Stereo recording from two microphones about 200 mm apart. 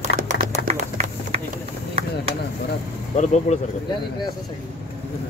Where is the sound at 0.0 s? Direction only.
45° right (ahead or behind).